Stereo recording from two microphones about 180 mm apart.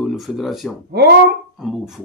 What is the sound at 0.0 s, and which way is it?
Speech, centre (ahead or behind).